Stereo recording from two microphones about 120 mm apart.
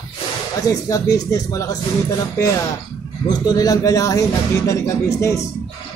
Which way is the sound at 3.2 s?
35° left (ahead or behind).